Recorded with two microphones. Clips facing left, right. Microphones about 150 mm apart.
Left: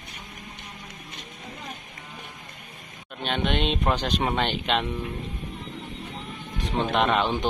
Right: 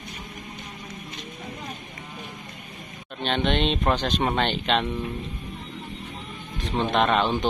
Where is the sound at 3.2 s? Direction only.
10° left (ahead or behind).